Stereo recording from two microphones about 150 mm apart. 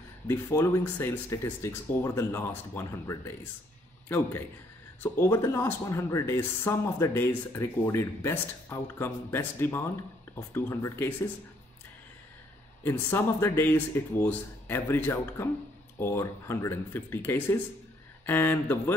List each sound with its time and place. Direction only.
0.3 s speech: 15° left (ahead or behind)
12.8 s speech: 15° left (ahead or behind)